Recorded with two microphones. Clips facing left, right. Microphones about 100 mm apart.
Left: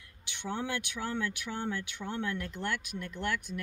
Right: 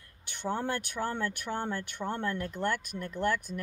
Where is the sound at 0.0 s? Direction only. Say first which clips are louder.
Right 5 dB; 45° right (ahead or behind).